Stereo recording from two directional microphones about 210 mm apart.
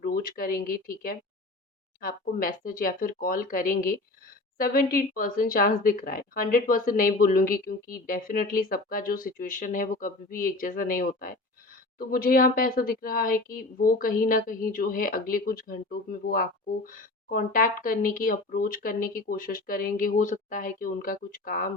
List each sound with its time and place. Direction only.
0.0 s a woman's voice: 45° left (ahead or behind)